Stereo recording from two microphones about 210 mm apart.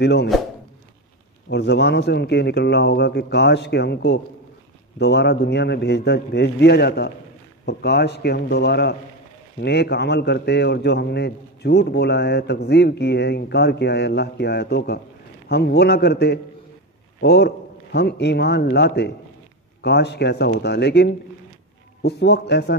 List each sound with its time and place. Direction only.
0.0 s a man's voice: 50° left (ahead or behind)
1.5 s a man's voice: 55° left (ahead or behind)